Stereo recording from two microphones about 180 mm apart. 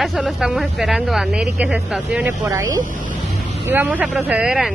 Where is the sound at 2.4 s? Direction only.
15° right (ahead or behind).